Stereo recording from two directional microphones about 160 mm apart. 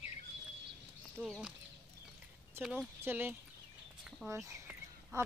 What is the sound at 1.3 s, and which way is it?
Speech, 5° right (ahead or behind).